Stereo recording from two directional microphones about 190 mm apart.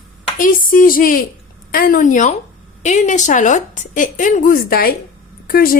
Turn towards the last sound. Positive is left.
turn(degrees=50)  # may be behind; listen again after turning